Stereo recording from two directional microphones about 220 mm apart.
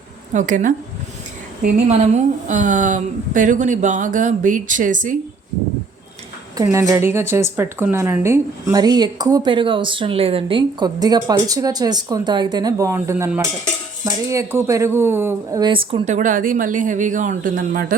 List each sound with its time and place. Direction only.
0.3 s speech: 35° right (ahead or behind)
6.6 s a woman's voice: 15° right (ahead or behind); by 17.9 s 40° right (ahead or behind)